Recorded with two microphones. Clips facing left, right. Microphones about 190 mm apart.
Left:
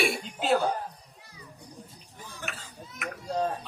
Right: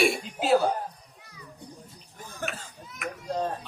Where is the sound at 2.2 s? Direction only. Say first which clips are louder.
Right 6 dB; 45° right (ahead or behind).